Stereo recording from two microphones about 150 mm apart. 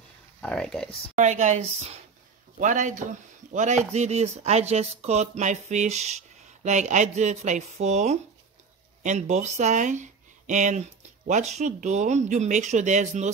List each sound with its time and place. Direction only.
0.4 s a sound: 5° left (ahead or behind)
1.1 s a man's voice: 50° right (ahead or behind)
2.6 s a man's voice: 55° right (ahead or behind)